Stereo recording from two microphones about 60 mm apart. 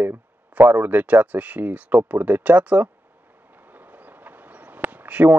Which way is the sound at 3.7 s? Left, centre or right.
Right.